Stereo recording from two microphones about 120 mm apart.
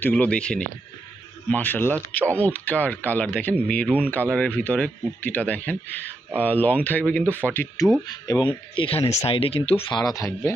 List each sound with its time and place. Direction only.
0.0 s speech: 10° left (ahead or behind)
8.0 s speech: 35° left (ahead or behind); by 10.0 s 55° left (ahead or behind)
10.0 s speech: 30° left (ahead or behind)